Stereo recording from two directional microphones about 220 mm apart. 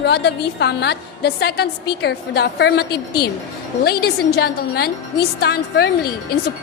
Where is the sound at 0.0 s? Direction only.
50° left (ahead or behind).